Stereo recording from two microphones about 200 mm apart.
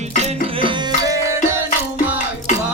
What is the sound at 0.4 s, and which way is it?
Tabla, 25° right (ahead or behind).